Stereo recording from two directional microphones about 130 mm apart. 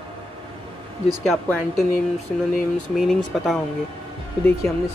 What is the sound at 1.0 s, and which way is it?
Speech, centre (ahead or behind).